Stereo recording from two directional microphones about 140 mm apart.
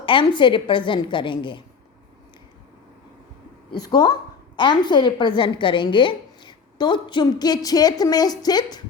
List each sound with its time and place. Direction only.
0.0 s a woman's voice: 35° left (ahead or behind)
3.7 s a woman's voice: 30° left (ahead or behind)